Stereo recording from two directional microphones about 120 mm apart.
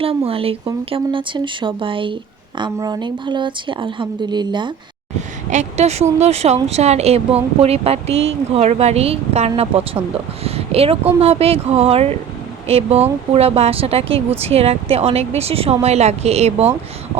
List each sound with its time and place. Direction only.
0.3 s a woman's voice: 50° right (ahead or behind)
5.5 s speech: 70° right (ahead or behind)
10.4 s a sound: 55° right (ahead or behind)
11.2 s speech: 55° right (ahead or behind)